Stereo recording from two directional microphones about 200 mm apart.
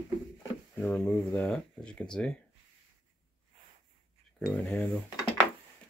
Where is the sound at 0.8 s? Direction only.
10° left (ahead or behind).